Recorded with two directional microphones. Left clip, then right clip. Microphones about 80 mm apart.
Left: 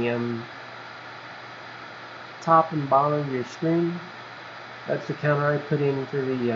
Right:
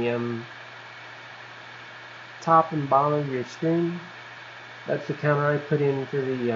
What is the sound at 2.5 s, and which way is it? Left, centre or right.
Speech, centre.